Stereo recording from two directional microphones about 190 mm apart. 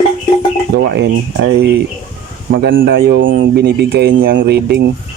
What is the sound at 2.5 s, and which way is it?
Speech, 45° right (ahead or behind).